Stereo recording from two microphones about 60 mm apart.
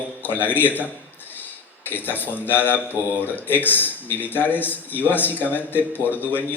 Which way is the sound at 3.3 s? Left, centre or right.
Left.